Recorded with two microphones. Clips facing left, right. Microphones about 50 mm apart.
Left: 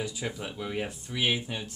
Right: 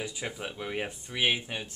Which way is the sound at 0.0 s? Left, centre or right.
Right.